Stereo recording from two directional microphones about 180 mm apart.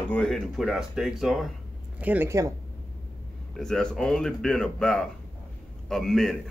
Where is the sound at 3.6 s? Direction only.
5° left (ahead or behind).